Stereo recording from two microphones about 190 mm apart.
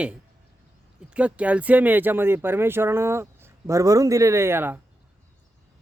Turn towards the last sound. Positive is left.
turn(degrees=-10)  # may be behind; listen again after turning